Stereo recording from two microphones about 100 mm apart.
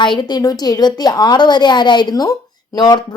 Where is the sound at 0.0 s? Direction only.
50° left (ahead or behind).